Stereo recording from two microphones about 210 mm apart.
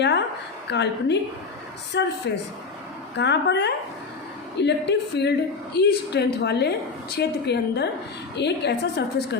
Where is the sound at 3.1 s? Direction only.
55° left (ahead or behind).